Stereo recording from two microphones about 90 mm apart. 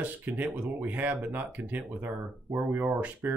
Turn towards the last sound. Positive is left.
turn(degrees=-20)  # may be behind; listen again after turning